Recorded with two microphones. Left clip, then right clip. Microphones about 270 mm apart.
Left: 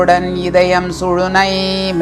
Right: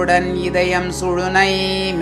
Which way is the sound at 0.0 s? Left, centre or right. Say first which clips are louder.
Left 4 dB; left.